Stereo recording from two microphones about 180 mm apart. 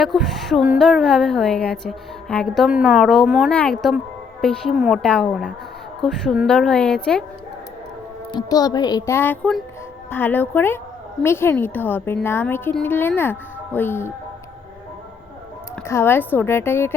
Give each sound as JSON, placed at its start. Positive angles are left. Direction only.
{"t": 0.0, "sound": "a woman's voice", "side_deg": 0}
{"t": 8.3, "sound": "a woman's voice", "side_deg": 20}
{"t": 15.9, "sound": "a woman's voice", "side_deg": 15}